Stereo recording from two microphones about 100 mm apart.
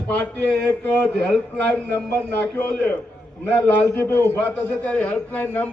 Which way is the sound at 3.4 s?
15° left (ahead or behind).